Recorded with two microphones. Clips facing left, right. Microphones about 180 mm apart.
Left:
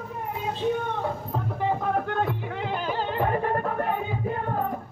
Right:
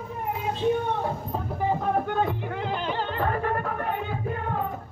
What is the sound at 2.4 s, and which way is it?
Music, centre (ahead or behind).